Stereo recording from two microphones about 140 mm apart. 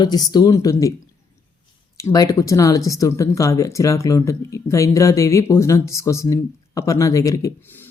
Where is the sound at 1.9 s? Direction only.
25° left (ahead or behind).